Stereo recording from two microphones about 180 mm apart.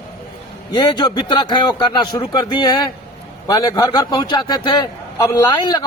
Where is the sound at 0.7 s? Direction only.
25° left (ahead or behind).